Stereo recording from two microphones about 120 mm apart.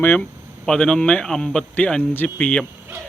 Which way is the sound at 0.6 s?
5° left (ahead or behind).